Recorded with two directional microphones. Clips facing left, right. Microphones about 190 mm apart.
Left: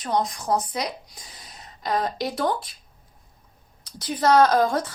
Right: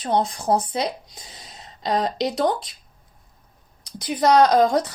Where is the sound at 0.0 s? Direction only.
30° right (ahead or behind).